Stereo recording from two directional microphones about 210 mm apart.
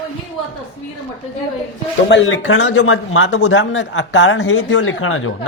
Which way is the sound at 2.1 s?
65° left (ahead or behind).